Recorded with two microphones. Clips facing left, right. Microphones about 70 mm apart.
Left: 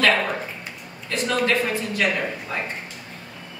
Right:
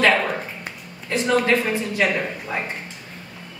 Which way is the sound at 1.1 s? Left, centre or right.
Right.